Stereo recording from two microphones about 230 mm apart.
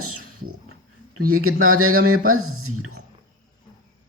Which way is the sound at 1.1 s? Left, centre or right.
Right.